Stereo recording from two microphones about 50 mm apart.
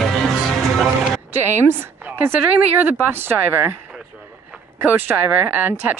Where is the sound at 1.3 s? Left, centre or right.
Right.